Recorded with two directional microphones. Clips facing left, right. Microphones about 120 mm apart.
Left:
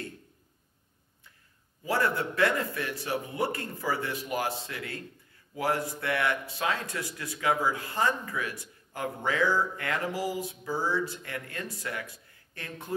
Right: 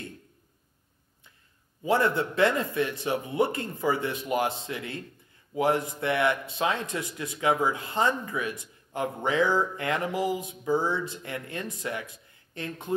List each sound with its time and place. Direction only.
1.8 s speech: 20° right (ahead or behind)